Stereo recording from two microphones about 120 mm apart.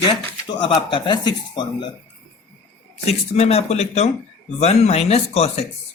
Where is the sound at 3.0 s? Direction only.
60° left (ahead or behind).